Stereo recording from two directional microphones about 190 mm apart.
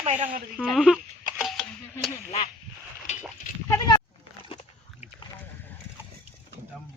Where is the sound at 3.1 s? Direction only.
35° left (ahead or behind).